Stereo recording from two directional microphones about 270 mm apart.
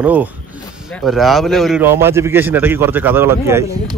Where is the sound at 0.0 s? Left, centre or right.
Centre.